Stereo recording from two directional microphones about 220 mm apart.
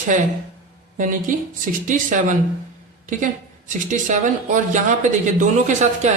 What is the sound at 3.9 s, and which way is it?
Speech, 35° right (ahead or behind).